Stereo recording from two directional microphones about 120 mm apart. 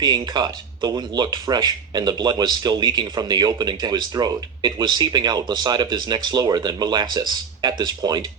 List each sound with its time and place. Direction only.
0.0 s speech: 35° right (ahead or behind)